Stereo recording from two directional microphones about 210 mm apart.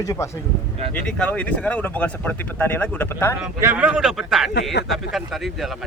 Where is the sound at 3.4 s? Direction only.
10° right (ahead or behind).